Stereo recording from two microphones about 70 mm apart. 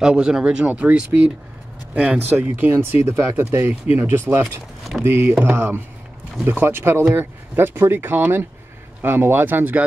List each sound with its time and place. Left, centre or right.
0.0 s speech: centre; by 9.8 s right